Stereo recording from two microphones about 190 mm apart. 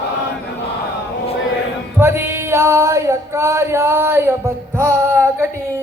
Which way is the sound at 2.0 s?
10° right (ahead or behind).